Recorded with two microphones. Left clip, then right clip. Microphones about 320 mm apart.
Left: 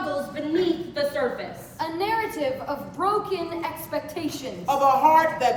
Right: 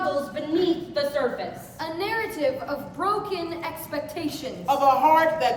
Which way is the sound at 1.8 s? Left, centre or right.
Centre.